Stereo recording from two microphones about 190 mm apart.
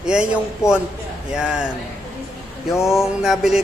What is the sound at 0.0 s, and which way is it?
Speech, 5° right (ahead or behind).